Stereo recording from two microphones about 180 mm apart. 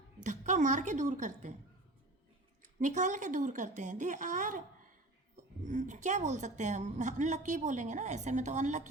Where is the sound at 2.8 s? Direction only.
45° right (ahead or behind).